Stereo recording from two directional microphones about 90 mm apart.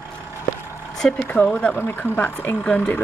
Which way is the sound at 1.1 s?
20° left (ahead or behind).